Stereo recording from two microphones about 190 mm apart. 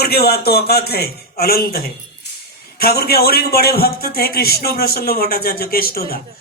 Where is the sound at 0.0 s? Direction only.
55° left (ahead or behind).